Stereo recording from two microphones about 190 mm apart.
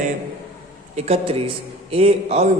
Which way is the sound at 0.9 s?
35° right (ahead or behind).